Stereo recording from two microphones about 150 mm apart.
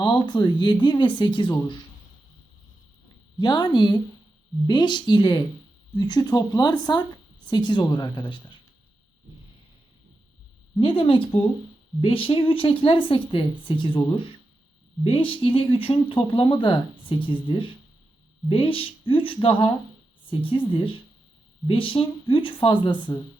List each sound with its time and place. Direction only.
0.0 s speech: 30° left (ahead or behind)
3.3 s speech: 30° left (ahead or behind)
10.8 s speech: 40° left (ahead or behind)